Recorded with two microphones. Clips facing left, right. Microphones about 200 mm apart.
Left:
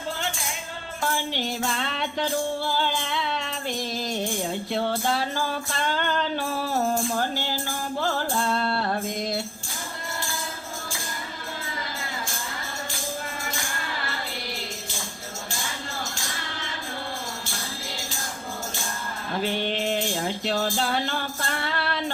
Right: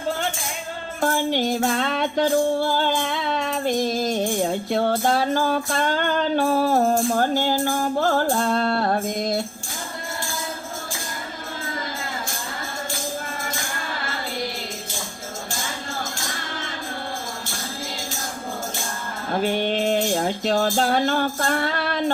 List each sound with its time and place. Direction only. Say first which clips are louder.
1.0 s music: right 7 dB; 45° right (ahead or behind)
19.3 s music: right 5 dB; 50° right (ahead or behind)